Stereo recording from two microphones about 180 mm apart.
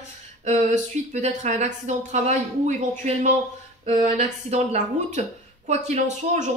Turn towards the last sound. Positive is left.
turn(degrees=-40)  # may be behind; listen again after turning